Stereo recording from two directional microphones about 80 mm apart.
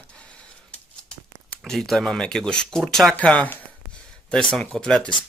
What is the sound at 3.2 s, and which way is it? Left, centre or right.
Speech, centre.